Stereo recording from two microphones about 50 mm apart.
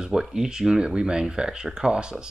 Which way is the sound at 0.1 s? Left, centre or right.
Centre.